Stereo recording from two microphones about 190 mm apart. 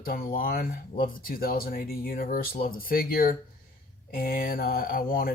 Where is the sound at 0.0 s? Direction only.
50° left (ahead or behind).